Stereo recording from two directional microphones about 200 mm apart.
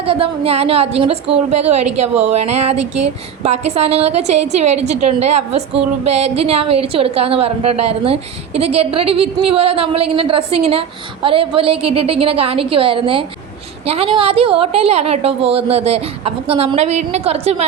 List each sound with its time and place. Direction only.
0.0 s a woman's voice: 30° right (ahead or behind)